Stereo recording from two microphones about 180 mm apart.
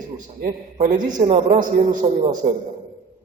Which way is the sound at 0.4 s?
45° right (ahead or behind).